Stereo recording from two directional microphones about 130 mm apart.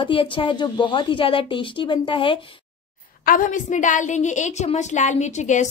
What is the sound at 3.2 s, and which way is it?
A woman's voice, 90° left.